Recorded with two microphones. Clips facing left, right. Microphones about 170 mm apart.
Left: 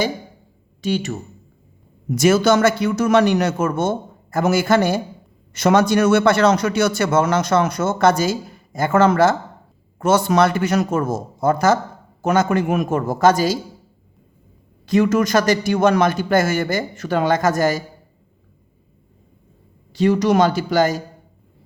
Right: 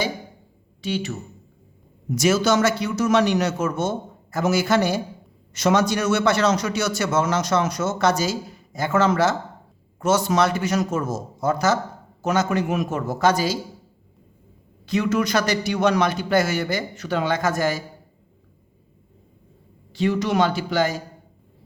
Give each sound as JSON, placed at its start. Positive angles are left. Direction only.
{"t": 0.8, "sound": "a man's voice", "side_deg": 45}
{"t": 2.1, "sound": "a man's voice", "side_deg": 55}
{"t": 14.8, "sound": "a man's voice", "side_deg": 45}
{"t": 19.9, "sound": "a man's voice", "side_deg": 45}